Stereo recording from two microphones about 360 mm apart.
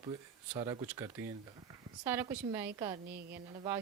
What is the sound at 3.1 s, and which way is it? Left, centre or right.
Speech, right.